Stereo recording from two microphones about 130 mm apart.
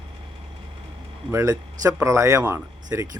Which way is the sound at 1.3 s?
25° right (ahead or behind).